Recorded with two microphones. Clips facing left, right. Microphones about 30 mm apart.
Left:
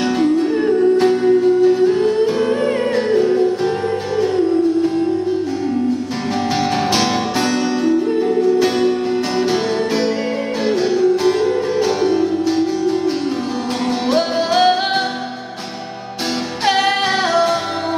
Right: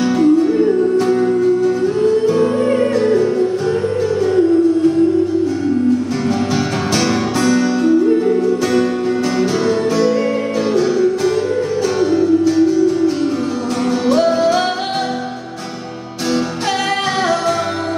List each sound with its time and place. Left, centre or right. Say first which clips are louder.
0.2 s music: right 5 dB; left
0.6 s music: even; left
7.0 s music: right 1 dB; left
7.8 s music: right 3 dB; centre
8.5 s music: even; left